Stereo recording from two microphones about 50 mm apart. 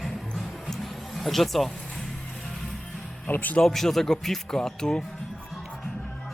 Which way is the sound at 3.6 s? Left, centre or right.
Centre.